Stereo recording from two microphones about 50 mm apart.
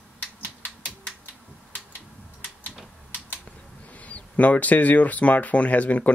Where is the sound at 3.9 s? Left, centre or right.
Left.